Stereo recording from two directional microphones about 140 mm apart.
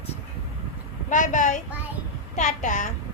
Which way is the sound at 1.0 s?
65° left (ahead or behind).